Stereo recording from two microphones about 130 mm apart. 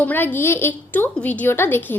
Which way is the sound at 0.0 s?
15° left (ahead or behind).